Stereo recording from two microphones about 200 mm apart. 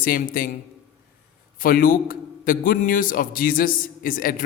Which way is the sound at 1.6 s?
45° left (ahead or behind).